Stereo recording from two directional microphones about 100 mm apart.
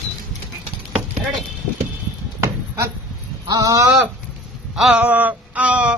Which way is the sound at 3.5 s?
35° right (ahead or behind).